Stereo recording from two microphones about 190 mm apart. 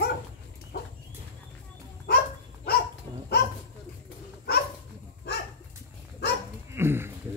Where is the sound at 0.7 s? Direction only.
55° left (ahead or behind).